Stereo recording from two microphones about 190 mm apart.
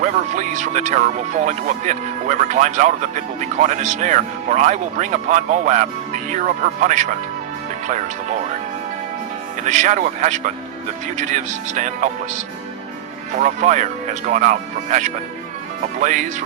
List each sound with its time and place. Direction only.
0.0 s speech: 40° right (ahead or behind)
9.6 s speech: 40° right (ahead or behind)